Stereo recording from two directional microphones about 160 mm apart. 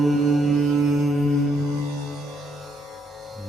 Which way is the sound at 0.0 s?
Centre (ahead or behind).